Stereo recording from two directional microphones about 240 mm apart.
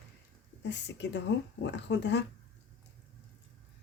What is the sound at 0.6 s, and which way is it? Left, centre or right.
Speech, left.